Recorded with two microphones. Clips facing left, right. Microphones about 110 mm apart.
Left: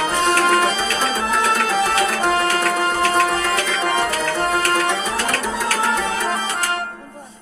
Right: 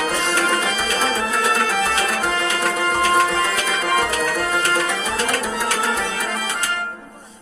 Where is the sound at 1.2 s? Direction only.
25° left (ahead or behind).